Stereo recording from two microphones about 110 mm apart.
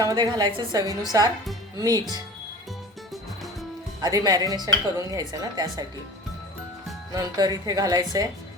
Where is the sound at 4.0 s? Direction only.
35° right (ahead or behind).